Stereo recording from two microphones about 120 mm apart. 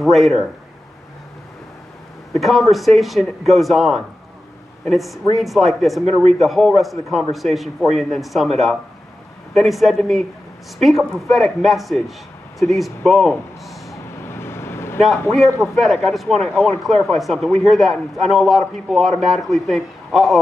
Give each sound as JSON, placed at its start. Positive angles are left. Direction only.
{"t": 0.0, "sound": "a man's voice", "side_deg": 0}
{"t": 2.3, "sound": "a man's voice", "side_deg": 0}
{"t": 14.2, "sound": "vehicle", "side_deg": 20}
{"t": 15.6, "sound": "a man's voice", "side_deg": 0}